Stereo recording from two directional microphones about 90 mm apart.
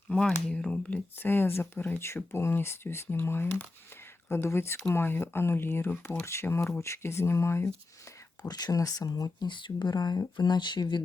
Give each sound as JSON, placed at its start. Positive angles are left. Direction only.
{"t": 0.1, "sound": "speech", "side_deg": 10}
{"t": 8.4, "sound": "speech", "side_deg": 45}